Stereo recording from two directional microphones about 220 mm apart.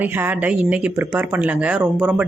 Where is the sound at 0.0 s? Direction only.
10° right (ahead or behind).